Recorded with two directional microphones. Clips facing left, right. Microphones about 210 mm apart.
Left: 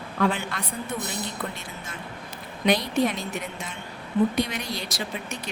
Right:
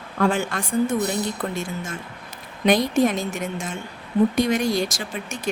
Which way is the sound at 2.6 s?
45° right (ahead or behind).